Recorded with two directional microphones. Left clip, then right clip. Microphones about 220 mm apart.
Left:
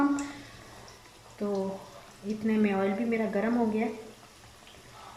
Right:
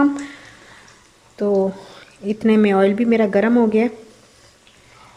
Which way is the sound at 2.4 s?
50° right (ahead or behind).